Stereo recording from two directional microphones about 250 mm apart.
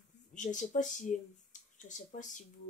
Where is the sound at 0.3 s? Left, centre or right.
Left.